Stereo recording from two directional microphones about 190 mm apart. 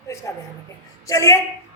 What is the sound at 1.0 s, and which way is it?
Speech, 15° left (ahead or behind).